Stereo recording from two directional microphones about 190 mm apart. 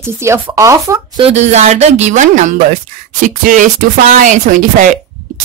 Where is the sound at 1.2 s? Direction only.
35° right (ahead or behind).